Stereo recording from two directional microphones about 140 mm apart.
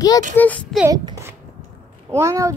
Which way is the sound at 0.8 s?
30° right (ahead or behind).